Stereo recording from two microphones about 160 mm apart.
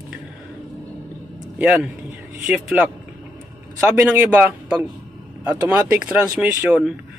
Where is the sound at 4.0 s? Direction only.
10° right (ahead or behind).